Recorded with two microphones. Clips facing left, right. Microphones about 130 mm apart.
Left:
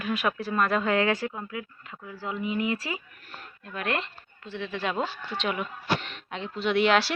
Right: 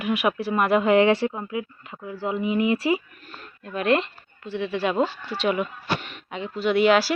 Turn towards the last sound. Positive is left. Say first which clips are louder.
# right 4 dB
turn(degrees=-5)  # may be behind; listen again after turning